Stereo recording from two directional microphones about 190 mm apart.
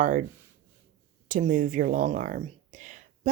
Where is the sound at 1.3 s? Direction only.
45° right (ahead or behind).